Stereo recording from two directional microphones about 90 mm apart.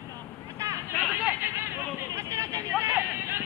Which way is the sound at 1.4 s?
25° right (ahead or behind).